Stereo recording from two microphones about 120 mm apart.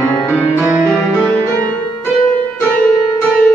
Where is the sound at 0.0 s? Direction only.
10° left (ahead or behind).